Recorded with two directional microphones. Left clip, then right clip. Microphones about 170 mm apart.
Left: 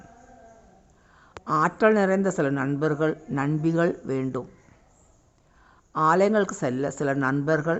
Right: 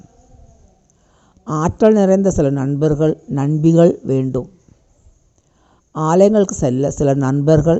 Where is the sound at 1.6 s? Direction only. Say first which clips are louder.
Right 9 dB; 35° right (ahead or behind).